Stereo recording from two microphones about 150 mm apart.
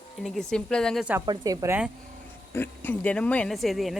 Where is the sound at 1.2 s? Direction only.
30° right (ahead or behind).